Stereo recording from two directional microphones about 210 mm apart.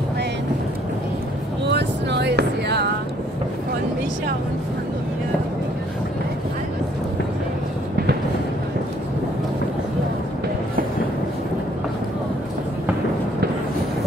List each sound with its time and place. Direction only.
1.7 s vehicle: 55° right (ahead or behind)